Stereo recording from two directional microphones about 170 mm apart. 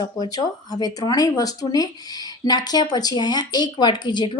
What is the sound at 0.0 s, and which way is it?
Speech, 20° left (ahead or behind).